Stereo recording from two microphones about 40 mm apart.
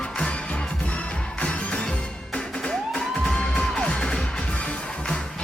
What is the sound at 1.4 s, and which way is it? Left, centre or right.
Music, left.